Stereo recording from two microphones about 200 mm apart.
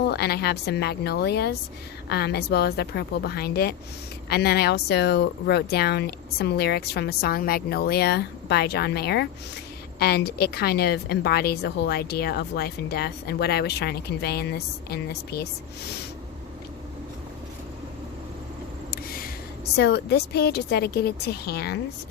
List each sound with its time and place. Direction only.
0.1 s speech: 55° left (ahead or behind)
18.9 s a sound: 50° left (ahead or behind)
19.7 s speech: 55° left (ahead or behind)